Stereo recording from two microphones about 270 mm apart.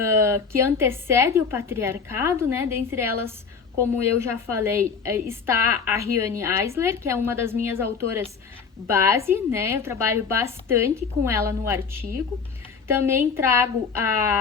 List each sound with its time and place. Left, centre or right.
0.0 s a woman's voice: centre